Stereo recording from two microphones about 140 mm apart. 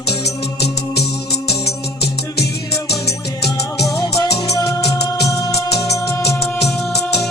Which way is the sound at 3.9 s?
25° left (ahead or behind).